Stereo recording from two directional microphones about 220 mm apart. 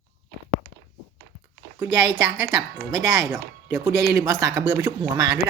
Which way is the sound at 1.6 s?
55° right (ahead or behind).